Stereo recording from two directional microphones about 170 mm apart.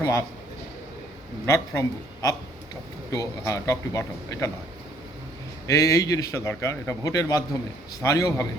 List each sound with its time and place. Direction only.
0.0 s a man's voice: 20° left (ahead or behind)
1.5 s a man's voice: 15° left (ahead or behind)
3.1 s a man's voice: 20° left (ahead or behind)
5.6 s a man's voice: 20° left (ahead or behind)